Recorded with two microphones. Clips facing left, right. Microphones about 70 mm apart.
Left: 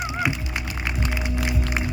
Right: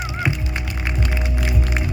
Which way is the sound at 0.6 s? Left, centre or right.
Right.